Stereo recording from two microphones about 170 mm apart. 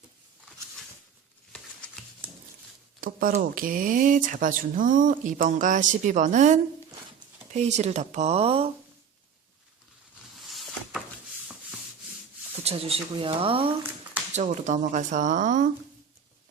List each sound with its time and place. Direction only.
3.0 s speech: 55° right (ahead or behind); by 8.7 s 35° right (ahead or behind)
12.6 s speech: 35° right (ahead or behind)
14.3 s speech: 45° right (ahead or behind)